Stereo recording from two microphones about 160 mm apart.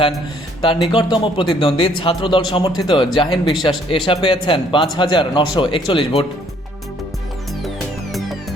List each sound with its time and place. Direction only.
0.6 s a man's voice: 30° left (ahead or behind)